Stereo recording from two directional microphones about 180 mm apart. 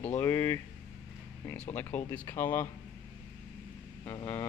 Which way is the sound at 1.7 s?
10° left (ahead or behind).